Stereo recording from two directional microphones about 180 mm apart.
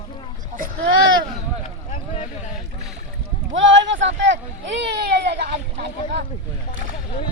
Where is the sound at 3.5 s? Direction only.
90° right; by 5.6 s 65° right (ahead or behind).